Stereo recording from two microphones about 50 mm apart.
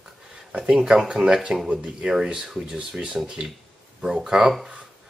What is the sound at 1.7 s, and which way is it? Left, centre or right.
Speech, right.